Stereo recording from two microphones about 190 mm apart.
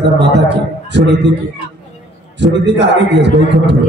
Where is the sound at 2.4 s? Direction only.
65° right (ahead or behind).